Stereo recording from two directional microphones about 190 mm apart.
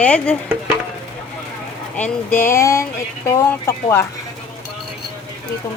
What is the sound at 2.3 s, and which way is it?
A woman's voice, 10° left (ahead or behind).